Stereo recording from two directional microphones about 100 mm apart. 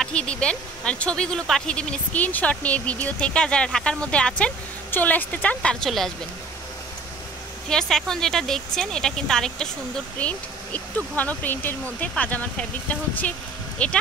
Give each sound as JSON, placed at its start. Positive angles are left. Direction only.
{"t": 0.0, "sound": "speech", "side_deg": 10}
{"t": 7.7, "sound": "speech", "side_deg": 5}